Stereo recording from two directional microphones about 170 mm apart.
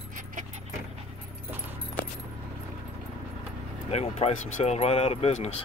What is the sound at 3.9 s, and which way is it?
Speech, 35° left (ahead or behind).